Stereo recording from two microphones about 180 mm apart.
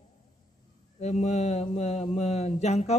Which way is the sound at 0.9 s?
40° left (ahead or behind).